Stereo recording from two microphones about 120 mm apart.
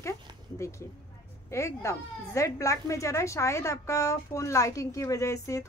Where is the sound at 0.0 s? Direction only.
25° left (ahead or behind).